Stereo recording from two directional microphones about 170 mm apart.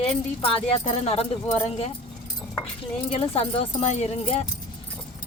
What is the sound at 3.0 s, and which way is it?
Speech, 35° left (ahead or behind).